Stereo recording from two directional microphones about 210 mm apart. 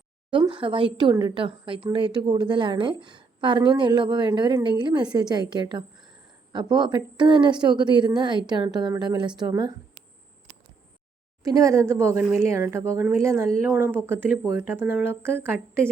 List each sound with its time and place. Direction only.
0.3 s a woman's voice: 25° right (ahead or behind)
11.4 s a woman's voice: 15° right (ahead or behind)